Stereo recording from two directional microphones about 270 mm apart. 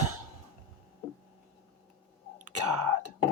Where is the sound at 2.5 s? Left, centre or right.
Right.